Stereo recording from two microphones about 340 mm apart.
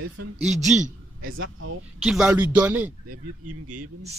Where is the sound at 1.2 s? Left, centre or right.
Right.